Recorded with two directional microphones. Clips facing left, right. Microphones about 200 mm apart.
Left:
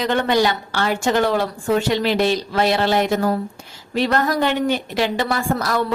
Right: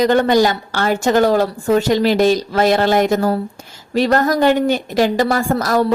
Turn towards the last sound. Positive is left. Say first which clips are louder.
# right 5 dB
turn(degrees=-40)  # may be behind; listen again after turning